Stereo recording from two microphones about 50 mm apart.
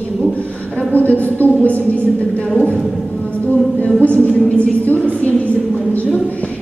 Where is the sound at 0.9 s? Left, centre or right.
Left.